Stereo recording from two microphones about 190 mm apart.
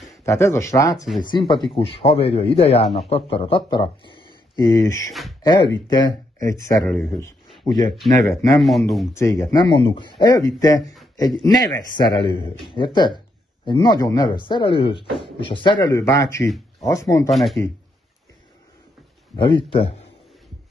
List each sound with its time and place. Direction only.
0.2 s speech: 15° left (ahead or behind)
1.5 s a man's voice: 25° left (ahead or behind)
8.5 s speech: centre (ahead or behind)
9.1 s speech: 15° left (ahead or behind)
17.3 s speech: centre (ahead or behind)
19.3 s speech: 25° left (ahead or behind)